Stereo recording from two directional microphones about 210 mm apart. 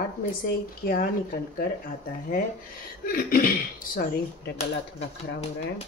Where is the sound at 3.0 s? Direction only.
45° left (ahead or behind).